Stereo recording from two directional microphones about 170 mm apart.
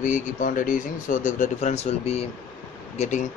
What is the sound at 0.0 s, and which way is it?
Speech, 50° left (ahead or behind).